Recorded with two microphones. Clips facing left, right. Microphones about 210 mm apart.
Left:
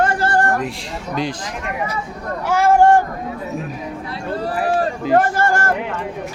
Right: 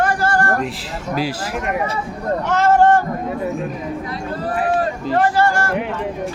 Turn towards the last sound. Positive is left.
turn(degrees=50)  # may be behind; listen again after turning